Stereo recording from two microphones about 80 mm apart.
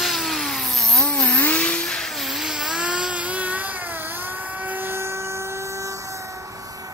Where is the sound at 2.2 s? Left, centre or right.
Centre; by 5.3 s right.